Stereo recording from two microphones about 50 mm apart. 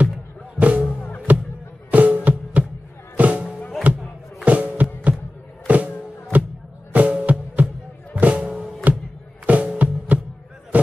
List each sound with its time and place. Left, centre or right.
0.6 s music: right
4.5 s music: right
10.7 s a sound: right